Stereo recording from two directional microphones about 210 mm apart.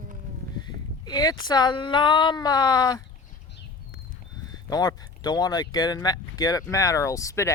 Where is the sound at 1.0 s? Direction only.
20° left (ahead or behind).